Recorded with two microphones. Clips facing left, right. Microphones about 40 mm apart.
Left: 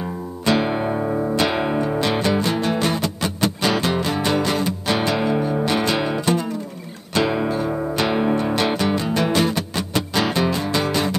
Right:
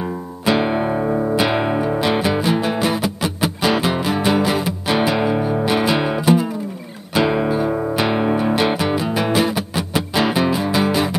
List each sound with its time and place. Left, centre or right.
0.0 s music: centre